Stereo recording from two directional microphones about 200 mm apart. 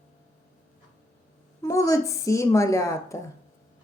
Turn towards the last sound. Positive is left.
turn(degrees=15)  # may be behind; listen again after turning